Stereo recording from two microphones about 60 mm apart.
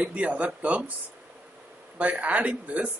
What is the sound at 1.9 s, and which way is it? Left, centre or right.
Speech, right.